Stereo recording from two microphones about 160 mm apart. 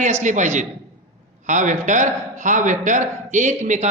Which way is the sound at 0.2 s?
50° right (ahead or behind).